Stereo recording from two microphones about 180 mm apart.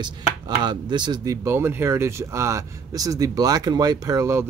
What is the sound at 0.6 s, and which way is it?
Speech, 25° right (ahead or behind).